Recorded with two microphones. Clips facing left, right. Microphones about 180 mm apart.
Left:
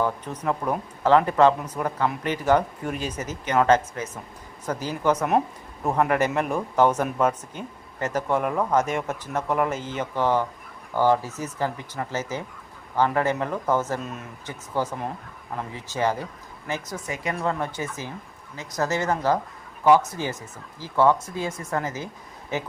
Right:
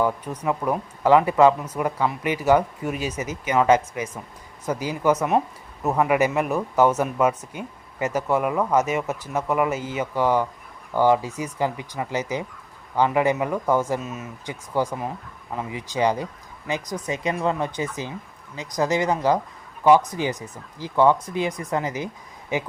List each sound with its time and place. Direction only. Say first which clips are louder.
0.0 s speech: right 2 dB; 5° right (ahead or behind)